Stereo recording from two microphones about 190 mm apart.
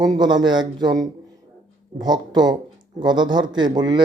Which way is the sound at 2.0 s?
20° right (ahead or behind).